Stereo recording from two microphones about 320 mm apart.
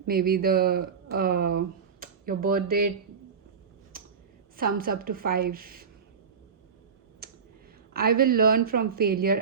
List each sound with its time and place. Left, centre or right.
0.1 s speech: right
2.0 s a sound: right
4.5 s speech: right
7.9 s speech: right